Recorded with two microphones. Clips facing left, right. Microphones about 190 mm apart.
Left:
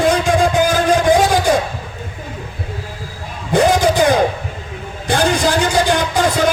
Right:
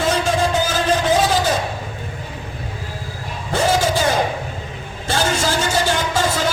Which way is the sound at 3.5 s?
15° left (ahead or behind).